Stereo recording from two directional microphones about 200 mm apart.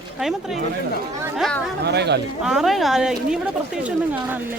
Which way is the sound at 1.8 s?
55° right (ahead or behind).